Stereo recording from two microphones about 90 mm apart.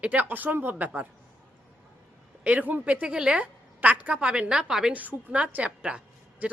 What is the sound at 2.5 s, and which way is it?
A woman's voice, 20° right (ahead or behind).